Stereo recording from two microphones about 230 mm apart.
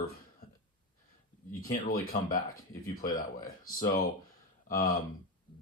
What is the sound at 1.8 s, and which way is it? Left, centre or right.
Speech, left.